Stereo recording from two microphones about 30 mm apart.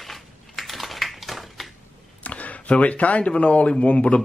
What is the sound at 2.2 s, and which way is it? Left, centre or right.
Speech, left.